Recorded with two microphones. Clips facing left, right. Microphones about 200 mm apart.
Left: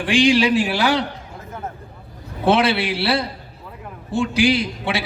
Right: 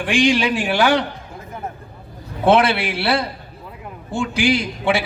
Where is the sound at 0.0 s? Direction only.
50° right (ahead or behind).